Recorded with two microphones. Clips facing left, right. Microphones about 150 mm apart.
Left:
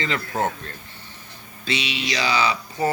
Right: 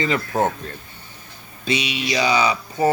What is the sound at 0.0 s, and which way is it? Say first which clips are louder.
Speech: right 4 dB; 15° right (ahead or behind).